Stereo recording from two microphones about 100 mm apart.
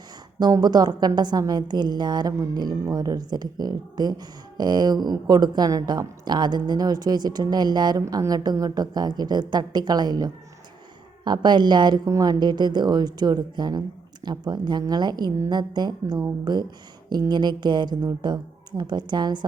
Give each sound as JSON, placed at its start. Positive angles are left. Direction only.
{"t": 0.3, "sound": "a woman's voice", "side_deg": -40}